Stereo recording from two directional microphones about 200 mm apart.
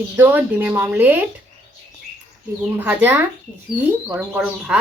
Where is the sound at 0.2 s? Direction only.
10° right (ahead or behind).